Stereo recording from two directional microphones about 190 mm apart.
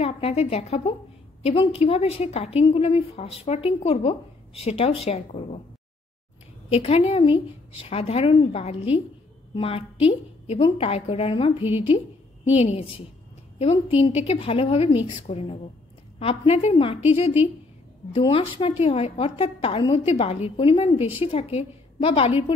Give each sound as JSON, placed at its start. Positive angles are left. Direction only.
{"t": 0.0, "sound": "a woman's voice", "side_deg": 35}
{"t": 6.7, "sound": "a woman's voice", "side_deg": 30}
{"t": 18.2, "sound": "a woman's voice", "side_deg": 30}